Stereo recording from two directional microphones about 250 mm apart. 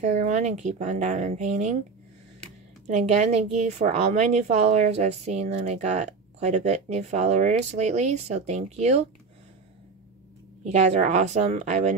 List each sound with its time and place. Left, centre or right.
0.0 s a woman's voice: right
2.9 s a woman's voice: right
10.6 s a woman's voice: right